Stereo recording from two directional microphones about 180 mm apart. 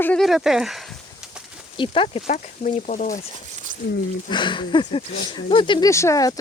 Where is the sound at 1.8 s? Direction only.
30° left (ahead or behind).